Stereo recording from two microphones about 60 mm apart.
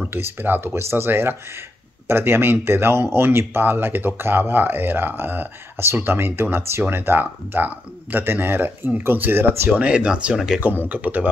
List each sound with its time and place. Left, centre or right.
0.1 s speech: right
9.7 s speech: centre
10.9 s speech: right